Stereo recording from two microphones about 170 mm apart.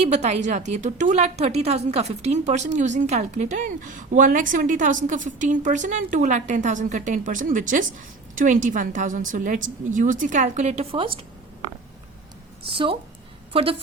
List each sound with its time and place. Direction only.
0.0 s a woman's voice: 40° right (ahead or behind)
12.7 s a woman's voice: 30° right (ahead or behind)